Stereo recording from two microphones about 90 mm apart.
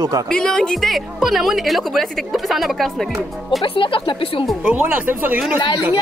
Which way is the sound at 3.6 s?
75° left (ahead or behind).